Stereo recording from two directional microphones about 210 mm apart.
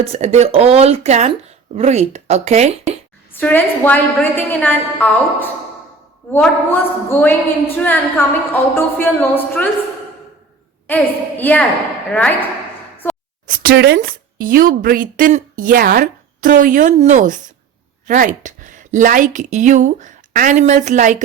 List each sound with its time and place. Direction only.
0.0 s speech: 30° right (ahead or behind)
3.3 s a woman's voice: 10° left (ahead or behind)
10.8 s a woman's voice: 10° left (ahead or behind)
13.5 s speech: 45° right (ahead or behind)